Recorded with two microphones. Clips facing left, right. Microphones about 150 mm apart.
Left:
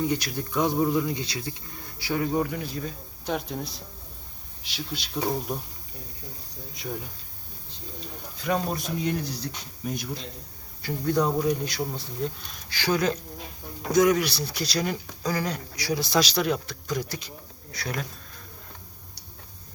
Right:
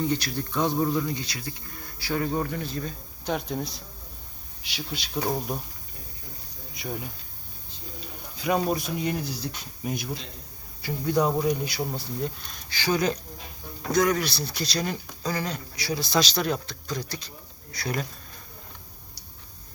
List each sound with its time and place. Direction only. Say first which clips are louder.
0.0 s speech: even; 15° left (ahead or behind); by 5.5 s centre (ahead or behind)
6.7 s speech: right 1 dB; 5° right (ahead or behind)
8.4 s speech: right 2 dB; 5° right (ahead or behind)
13.9 s speech: left 3 dB; 15° left (ahead or behind)
17.7 s speech: right 2 dB; centre (ahead or behind)